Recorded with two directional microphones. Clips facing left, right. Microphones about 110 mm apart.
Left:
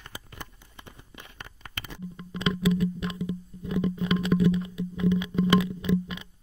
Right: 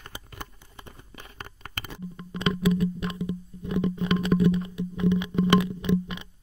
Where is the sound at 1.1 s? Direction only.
40° right (ahead or behind).